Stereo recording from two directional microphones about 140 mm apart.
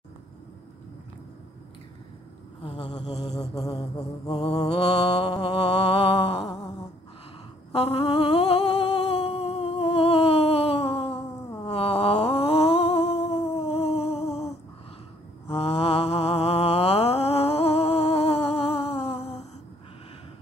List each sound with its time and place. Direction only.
4.6 s mantra: 40° left (ahead or behind)
7.7 s humming: 45° left (ahead or behind)
11.6 s a sound: 45° left (ahead or behind)
15.5 s mantra: 45° left (ahead or behind)